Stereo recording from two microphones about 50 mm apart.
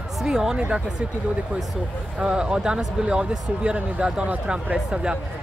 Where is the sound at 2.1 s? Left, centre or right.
Centre.